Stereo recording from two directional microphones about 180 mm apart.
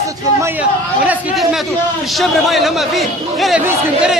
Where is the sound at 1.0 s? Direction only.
Centre (ahead or behind).